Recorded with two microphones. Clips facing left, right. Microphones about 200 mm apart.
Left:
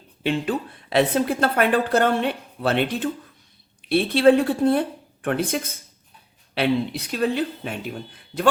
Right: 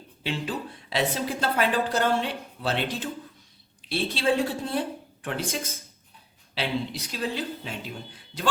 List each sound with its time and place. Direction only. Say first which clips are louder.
0.2 s a woman's voice: left 7 dB; 55° left (ahead or behind)